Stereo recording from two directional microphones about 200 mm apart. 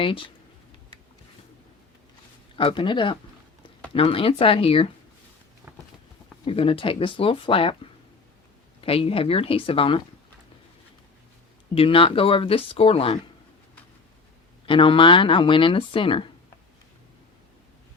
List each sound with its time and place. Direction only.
0.0 s speech: 25° left (ahead or behind)
2.6 s speech: 25° left (ahead or behind)
5.7 s run: 10° right (ahead or behind)
6.4 s speech: 30° left (ahead or behind)
8.8 s speech: 30° left (ahead or behind)
11.7 s speech: 25° left (ahead or behind)
14.7 s speech: 25° left (ahead or behind)